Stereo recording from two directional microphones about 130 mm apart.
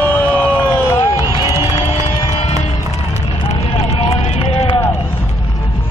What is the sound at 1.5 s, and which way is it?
Music, 55° left (ahead or behind).